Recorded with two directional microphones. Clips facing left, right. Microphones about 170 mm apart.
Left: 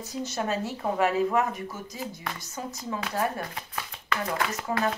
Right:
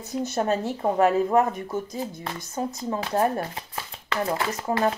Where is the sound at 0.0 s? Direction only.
55° right (ahead or behind).